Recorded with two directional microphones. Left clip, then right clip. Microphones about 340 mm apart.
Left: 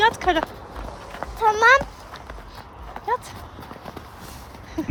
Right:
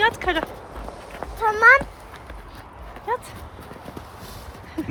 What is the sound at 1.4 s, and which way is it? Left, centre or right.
Speech, centre.